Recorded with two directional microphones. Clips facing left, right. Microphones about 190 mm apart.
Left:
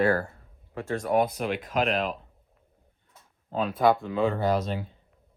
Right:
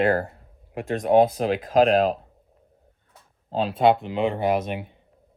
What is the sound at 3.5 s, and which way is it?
Speech, 30° right (ahead or behind).